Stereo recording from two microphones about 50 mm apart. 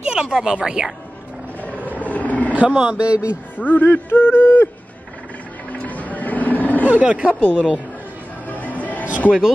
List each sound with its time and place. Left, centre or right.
0.0 s speech: centre
2.0 s a sound: left
2.5 s speech: right
3.5 s speech: left
4.1 s a sound: left
5.7 s music: left
6.8 s speech: right
7.3 s speech: left
8.5 s music: left